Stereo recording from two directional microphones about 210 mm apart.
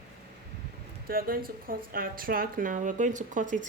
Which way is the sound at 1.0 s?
45° right (ahead or behind).